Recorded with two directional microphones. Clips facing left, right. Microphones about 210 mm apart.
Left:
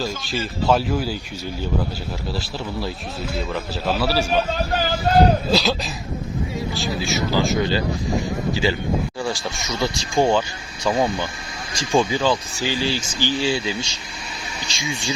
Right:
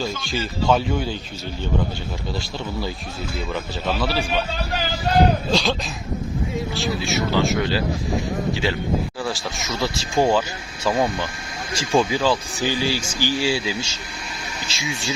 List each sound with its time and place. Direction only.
0.0 s speech: centre (ahead or behind)
3.5 s speech: 5° left (ahead or behind)
4.1 s a man's voice: 40° left (ahead or behind)
5.5 s speech: centre (ahead or behind)
12.5 s speech: 15° right (ahead or behind)